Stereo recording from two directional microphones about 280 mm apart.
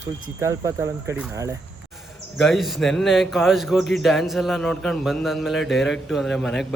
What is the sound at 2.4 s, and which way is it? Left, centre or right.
A man's voice, centre.